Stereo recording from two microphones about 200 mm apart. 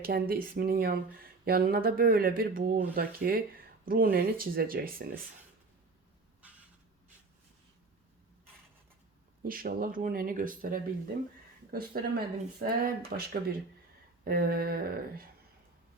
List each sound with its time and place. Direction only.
0.0 s speech: 50° right (ahead or behind)
9.4 s speech: 50° right (ahead or behind)